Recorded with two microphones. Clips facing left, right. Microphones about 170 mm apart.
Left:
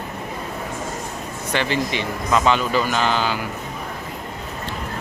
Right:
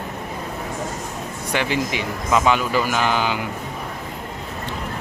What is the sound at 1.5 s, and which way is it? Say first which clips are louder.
Speech: even; 10° right (ahead or behind).